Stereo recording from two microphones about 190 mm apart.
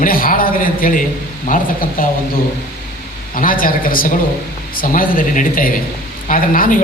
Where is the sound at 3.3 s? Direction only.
45° left (ahead or behind).